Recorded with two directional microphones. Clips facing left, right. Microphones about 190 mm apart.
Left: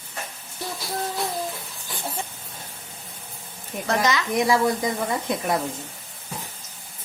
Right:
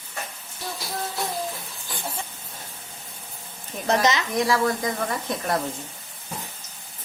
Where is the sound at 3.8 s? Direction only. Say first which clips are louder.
Right 1 dB; 20° right (ahead or behind).